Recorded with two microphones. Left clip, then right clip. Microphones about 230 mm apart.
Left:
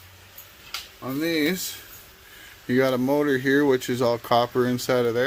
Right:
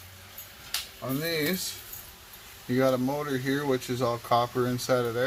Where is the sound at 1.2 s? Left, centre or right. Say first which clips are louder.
Left 5 dB; left.